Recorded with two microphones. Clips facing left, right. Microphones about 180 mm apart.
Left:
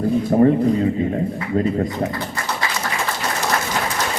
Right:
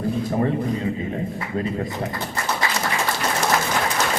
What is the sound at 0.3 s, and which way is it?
Speech, 50° left (ahead or behind).